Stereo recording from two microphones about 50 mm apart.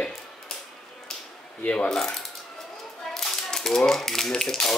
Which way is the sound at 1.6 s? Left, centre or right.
Left.